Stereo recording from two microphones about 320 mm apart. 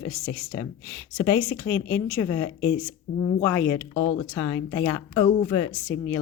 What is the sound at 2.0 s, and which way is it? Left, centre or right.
A woman's voice, centre.